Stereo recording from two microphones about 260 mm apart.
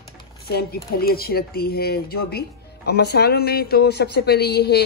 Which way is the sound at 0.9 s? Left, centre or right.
Left.